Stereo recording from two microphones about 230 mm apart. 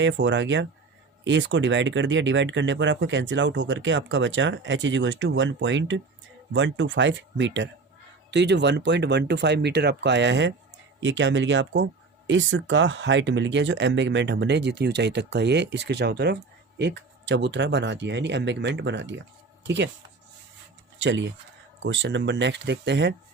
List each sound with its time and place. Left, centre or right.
0.0 s speech: right
21.0 s speech: right